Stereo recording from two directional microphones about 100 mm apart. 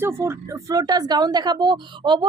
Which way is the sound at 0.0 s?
25° right (ahead or behind).